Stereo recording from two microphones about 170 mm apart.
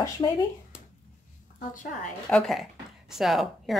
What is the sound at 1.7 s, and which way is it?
Speech, 50° left (ahead or behind).